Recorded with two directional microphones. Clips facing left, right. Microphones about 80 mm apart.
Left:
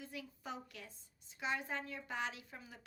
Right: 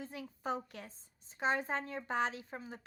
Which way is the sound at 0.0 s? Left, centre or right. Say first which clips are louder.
Right 6 dB; right.